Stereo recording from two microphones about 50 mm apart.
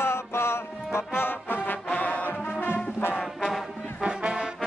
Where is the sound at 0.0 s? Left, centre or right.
Left.